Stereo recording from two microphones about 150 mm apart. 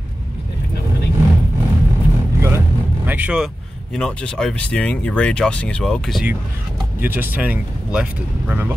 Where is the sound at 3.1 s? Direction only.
10° right (ahead or behind).